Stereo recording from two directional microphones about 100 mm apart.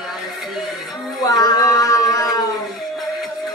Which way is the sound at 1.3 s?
40° left (ahead or behind).